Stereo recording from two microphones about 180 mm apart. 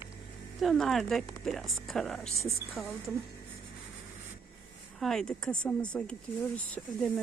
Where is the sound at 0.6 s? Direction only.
Centre (ahead or behind).